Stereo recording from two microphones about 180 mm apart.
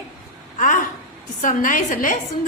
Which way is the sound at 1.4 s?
45° left (ahead or behind).